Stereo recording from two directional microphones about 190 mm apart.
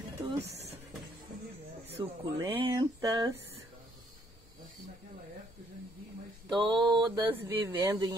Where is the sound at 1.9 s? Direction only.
15° right (ahead or behind).